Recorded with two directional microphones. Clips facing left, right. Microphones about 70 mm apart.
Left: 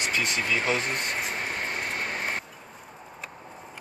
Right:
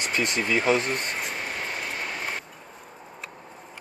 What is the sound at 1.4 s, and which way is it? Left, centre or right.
Vehicle, left.